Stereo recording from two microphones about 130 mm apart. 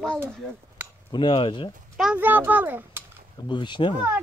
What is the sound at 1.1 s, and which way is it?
Speech, 40° left (ahead or behind).